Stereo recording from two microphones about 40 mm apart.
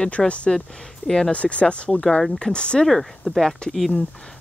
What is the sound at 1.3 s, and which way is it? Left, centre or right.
Speech, left.